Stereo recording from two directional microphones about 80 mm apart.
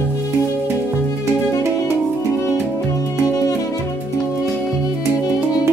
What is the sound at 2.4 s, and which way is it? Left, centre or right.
Music, left.